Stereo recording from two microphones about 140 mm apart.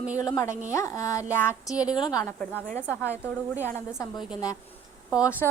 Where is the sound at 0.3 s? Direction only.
25° left (ahead or behind).